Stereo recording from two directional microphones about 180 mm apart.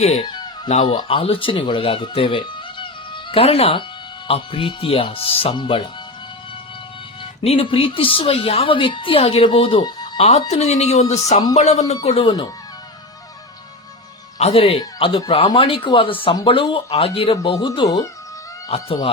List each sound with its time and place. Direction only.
0.0 s a woman's voice: 35° left (ahead or behind)
0.3 s music: 25° left (ahead or behind)
0.7 s a woman's voice: 30° left (ahead or behind)
7.4 s a woman's voice: 30° left (ahead or behind)
14.3 s a woman's voice: 35° left (ahead or behind)